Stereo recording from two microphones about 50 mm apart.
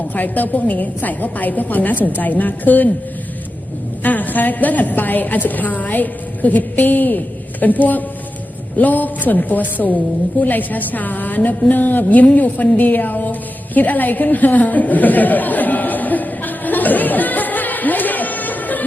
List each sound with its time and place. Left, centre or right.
0.1 s a woman's voice: left
4.0 s a woman's voice: left
13.7 s a sound: left